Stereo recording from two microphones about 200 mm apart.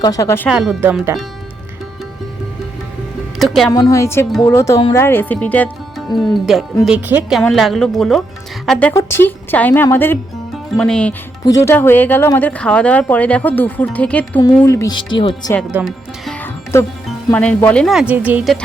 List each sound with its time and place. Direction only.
0.0 s speech: 15° left (ahead or behind)
0.4 s a woman's voice: centre (ahead or behind)
3.3 s music: centre (ahead or behind)
3.7 s a woman's voice: 15° left (ahead or behind)
11.4 s speech: 15° left (ahead or behind)
14.6 s speech: 20° left (ahead or behind)
15.7 s music: centre (ahead or behind)
16.7 s a woman's voice: 15° left (ahead or behind); by 18.5 s 5° right (ahead or behind)